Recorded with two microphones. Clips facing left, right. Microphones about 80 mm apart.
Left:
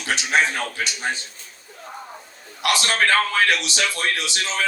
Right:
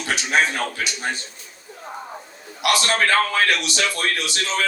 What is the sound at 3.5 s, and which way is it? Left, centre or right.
Speech, right.